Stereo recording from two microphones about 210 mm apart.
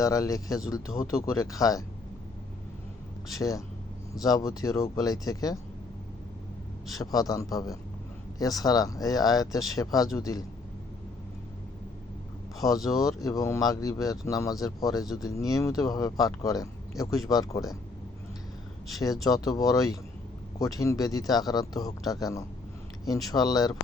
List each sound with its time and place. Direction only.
0.0 s speech: 15° left (ahead or behind)
3.3 s speech: 15° left (ahead or behind)
7.0 s speech: 15° left (ahead or behind)
12.5 s speech: 15° left (ahead or behind)
19.2 s speech: 15° left (ahead or behind)